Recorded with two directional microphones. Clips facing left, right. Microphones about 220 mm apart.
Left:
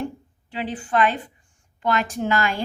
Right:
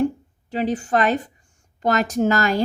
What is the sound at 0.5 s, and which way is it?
A woman's voice, 40° right (ahead or behind).